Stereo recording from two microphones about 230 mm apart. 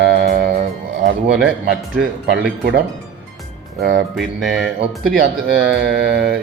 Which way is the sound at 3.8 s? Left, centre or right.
Right.